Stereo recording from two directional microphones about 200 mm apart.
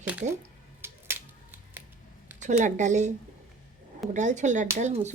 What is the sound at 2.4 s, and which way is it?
Speech, 35° right (ahead or behind).